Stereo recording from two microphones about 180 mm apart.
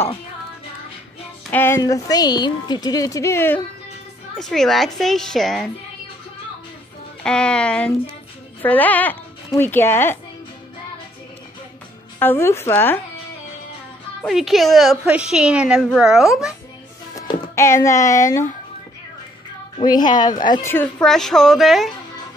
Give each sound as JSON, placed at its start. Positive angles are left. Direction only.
{"t": 1.5, "sound": "speech", "side_deg": 15}
{"t": 4.4, "sound": "a woman's voice", "side_deg": 0}
{"t": 7.2, "sound": "a woman's voice", "side_deg": 5}
{"t": 12.2, "sound": "a woman's voice", "side_deg": 10}
{"t": 14.2, "sound": "a woman's voice", "side_deg": 0}
{"t": 17.1, "sound": "speech", "side_deg": 15}
{"t": 19.8, "sound": "speech", "side_deg": 25}
{"t": 20.7, "sound": "a woman's voice", "side_deg": 5}